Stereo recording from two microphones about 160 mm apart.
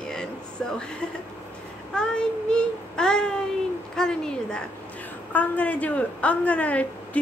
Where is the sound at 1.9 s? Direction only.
5° left (ahead or behind).